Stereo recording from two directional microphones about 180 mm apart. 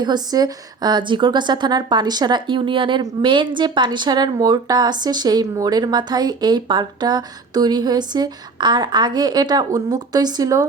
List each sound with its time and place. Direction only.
0.0 s a woman's voice: 20° right (ahead or behind)